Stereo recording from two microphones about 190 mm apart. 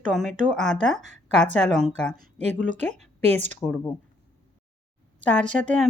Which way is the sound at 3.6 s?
10° left (ahead or behind).